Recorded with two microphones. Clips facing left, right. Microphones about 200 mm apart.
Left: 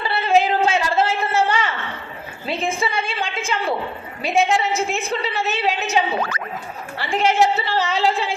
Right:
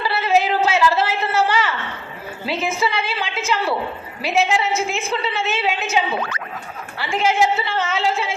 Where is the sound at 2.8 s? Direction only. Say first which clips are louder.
Right 1 dB; 50° left (ahead or behind).